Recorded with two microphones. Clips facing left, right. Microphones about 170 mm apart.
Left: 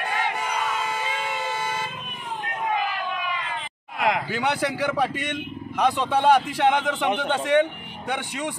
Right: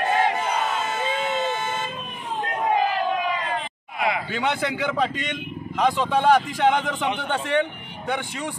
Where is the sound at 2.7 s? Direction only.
35° right (ahead or behind).